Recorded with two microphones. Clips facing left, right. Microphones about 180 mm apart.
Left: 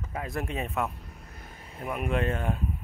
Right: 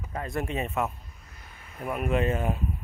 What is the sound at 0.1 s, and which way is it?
Speech, centre (ahead or behind).